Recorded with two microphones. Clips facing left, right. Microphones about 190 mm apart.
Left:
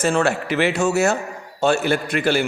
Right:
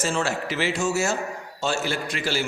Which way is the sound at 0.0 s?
60° left (ahead or behind).